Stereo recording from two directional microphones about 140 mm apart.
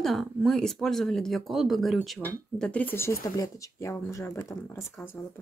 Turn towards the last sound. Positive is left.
turn(degrees=20)  # may be behind; listen again after turning